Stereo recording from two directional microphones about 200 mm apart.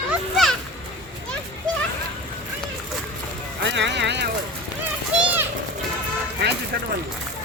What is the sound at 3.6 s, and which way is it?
Music, 60° right (ahead or behind).